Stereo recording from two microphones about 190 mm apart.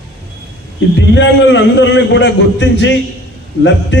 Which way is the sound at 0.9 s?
70° left (ahead or behind).